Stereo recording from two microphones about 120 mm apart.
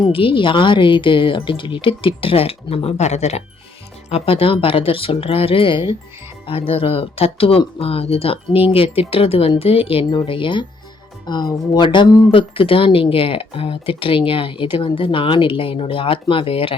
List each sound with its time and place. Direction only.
0.1 s speech: 45° left (ahead or behind); by 3.4 s 65° left (ahead or behind)
4.1 s speech: 50° left (ahead or behind)